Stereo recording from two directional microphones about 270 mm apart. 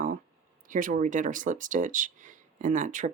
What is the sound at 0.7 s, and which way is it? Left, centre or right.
Speech, right.